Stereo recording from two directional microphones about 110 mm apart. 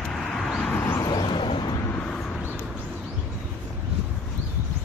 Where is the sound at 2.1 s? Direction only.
5° left (ahead or behind).